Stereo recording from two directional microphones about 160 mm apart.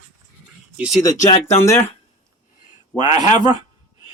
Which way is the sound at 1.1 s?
45° left (ahead or behind).